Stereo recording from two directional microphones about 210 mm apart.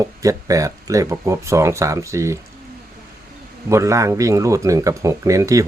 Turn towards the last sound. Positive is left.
turn(degrees=-15)  # may be behind; listen again after turning